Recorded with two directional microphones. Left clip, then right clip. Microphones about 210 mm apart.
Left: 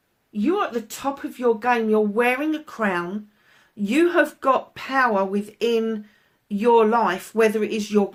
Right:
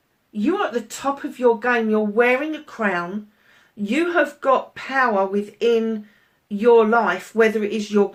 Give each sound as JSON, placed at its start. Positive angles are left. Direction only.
{"t": 0.3, "sound": "speech", "side_deg": 40}